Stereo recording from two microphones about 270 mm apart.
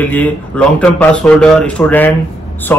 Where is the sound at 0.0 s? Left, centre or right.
Centre.